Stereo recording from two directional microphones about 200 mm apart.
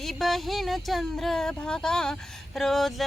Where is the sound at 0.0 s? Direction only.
Centre (ahead or behind).